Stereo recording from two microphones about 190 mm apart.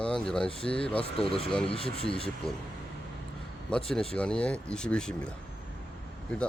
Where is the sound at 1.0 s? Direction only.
30° left (ahead or behind).